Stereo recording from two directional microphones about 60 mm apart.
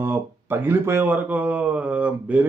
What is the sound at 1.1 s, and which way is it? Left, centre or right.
Speech, right.